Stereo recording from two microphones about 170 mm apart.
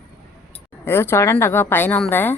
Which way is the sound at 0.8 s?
15° left (ahead or behind).